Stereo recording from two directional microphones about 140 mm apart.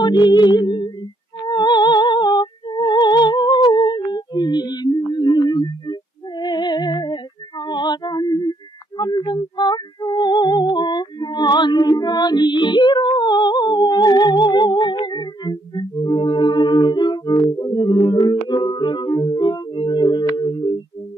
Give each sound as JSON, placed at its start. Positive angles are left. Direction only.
{"t": 0.0, "sound": "music", "side_deg": 30}